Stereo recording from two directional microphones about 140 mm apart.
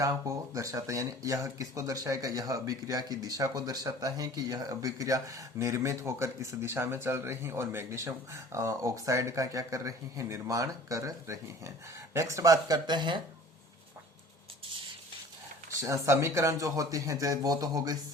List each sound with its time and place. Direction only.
0.0 s speech: 25° right (ahead or behind)
16.0 s speech: 20° right (ahead or behind)